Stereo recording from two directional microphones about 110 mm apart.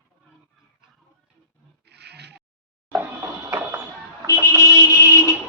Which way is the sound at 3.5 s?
25° right (ahead or behind).